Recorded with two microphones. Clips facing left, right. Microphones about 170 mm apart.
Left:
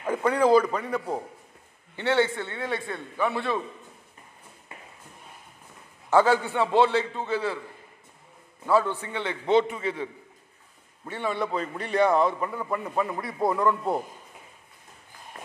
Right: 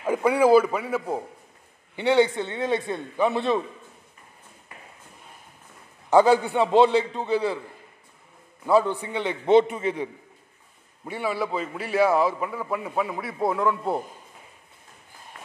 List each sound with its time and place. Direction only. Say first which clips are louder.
0.0 s a man's voice: right 3 dB; 10° right (ahead or behind)
6.0 s a man's voice: right 3 dB; 15° right (ahead or behind)
8.6 s a man's voice: right 3 dB; 15° right (ahead or behind)
11.1 s a man's voice: right 1 dB; 10° right (ahead or behind)
15.3 s walk: left 3 dB; 30° left (ahead or behind)